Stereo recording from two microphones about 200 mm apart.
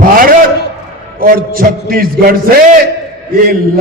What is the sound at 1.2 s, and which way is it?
A man's voice, 45° right (ahead or behind).